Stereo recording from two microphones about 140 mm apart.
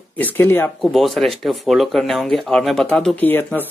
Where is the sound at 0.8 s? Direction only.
Centre (ahead or behind).